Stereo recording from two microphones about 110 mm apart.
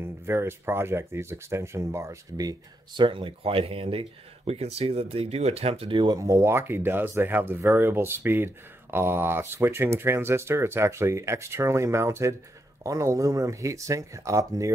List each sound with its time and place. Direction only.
0.0 s speech: 20° right (ahead or behind)
3.0 s speech: 50° right (ahead or behind)
6.1 s speech: 25° right (ahead or behind)